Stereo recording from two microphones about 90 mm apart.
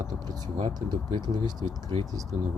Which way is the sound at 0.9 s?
50° right (ahead or behind).